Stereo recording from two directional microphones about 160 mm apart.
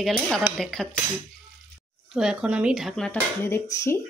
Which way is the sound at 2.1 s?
5° right (ahead or behind).